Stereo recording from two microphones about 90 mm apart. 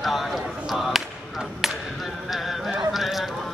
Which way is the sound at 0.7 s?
Centre (ahead or behind).